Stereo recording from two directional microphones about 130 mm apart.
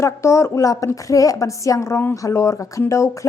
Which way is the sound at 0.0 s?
20° left (ahead or behind).